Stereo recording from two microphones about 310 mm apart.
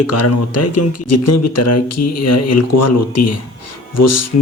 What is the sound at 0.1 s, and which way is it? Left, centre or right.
Speech, left.